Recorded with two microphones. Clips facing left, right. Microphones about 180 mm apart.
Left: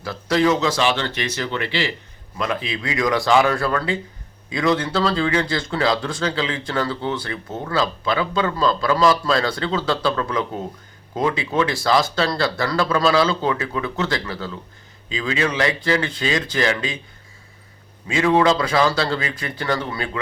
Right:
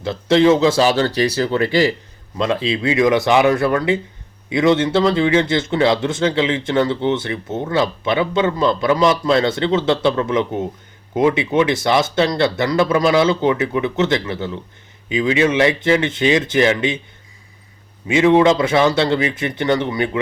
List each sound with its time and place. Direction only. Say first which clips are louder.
0.0 s speech: right 5 dB; 25° right (ahead or behind)
2.4 s speech: right 6 dB; 25° right (ahead or behind)
18.1 s speech: right 5 dB; 20° right (ahead or behind)